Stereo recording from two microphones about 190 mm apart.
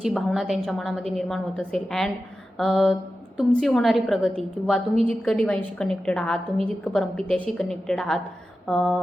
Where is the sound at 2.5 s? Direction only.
Centre (ahead or behind).